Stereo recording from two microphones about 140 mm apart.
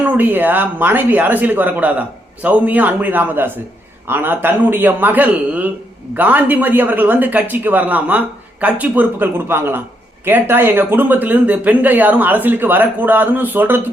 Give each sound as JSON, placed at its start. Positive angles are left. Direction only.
{"t": 0.0, "sound": "speech", "side_deg": -15}